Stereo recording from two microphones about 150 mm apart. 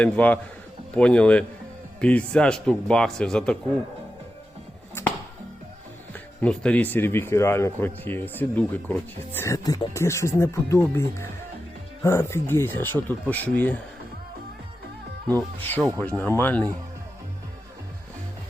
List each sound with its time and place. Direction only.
0.0 s a man's voice: 10° left (ahead or behind)
5.0 s music: 15° left (ahead or behind)
6.1 s speech: 5° left (ahead or behind)
15.3 s speech: 10° left (ahead or behind)